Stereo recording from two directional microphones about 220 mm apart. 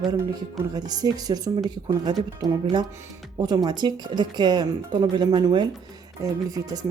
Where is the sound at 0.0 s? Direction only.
20° right (ahead or behind).